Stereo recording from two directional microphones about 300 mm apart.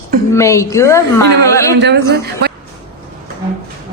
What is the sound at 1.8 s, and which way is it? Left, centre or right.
Speech, right.